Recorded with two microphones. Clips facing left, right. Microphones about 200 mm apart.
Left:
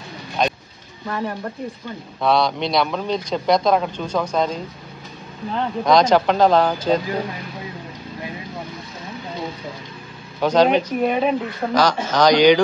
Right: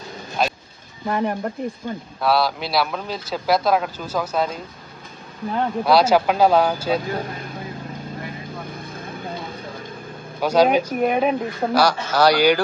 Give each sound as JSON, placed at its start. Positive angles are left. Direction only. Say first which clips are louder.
{"t": 0.4, "sound": "a sound", "louder": "left 1 dB", "side_deg": -5}
{"t": 1.0, "sound": "speech", "louder": "right 3 dB", "side_deg": -20}
{"t": 2.2, "sound": "a man's voice", "louder": "left 2 dB", "side_deg": -5}
{"t": 10.4, "sound": "speech", "louder": "left 1 dB", "side_deg": -10}